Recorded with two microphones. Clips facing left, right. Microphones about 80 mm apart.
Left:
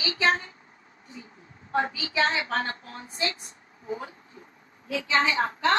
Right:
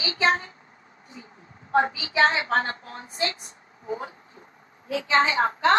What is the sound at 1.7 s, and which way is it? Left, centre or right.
A woman's voice, right.